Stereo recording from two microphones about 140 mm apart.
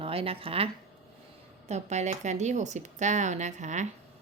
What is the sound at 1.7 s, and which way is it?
Speech, 55° right (ahead or behind).